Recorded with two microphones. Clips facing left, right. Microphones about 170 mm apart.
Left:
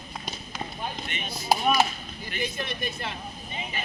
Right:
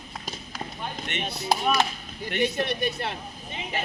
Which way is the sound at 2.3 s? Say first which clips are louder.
Right 7 dB; 70° right (ahead or behind).